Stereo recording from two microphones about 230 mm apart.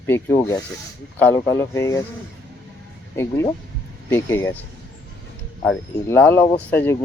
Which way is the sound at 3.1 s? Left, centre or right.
Centre.